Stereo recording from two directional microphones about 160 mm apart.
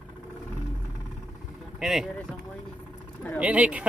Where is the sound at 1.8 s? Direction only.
5° right (ahead or behind).